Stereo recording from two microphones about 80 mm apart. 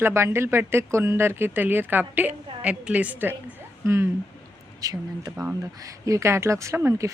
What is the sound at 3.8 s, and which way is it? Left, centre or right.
Speech, right.